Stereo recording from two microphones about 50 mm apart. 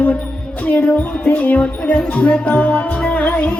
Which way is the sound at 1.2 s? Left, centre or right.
Left.